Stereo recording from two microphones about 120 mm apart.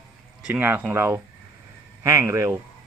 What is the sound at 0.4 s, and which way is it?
Speech, 15° right (ahead or behind).